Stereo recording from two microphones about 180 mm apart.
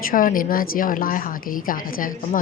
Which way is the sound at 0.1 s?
50° left (ahead or behind).